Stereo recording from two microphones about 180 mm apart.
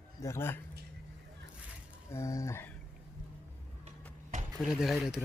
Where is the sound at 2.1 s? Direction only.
15° left (ahead or behind).